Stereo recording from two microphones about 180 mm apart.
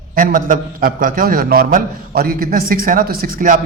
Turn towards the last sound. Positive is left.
turn(degrees=-50)  # may be behind; listen again after turning